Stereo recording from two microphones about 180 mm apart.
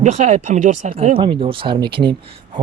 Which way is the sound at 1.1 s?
30° right (ahead or behind).